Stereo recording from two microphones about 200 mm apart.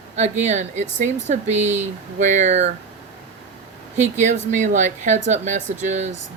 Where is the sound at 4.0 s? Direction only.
35° right (ahead or behind).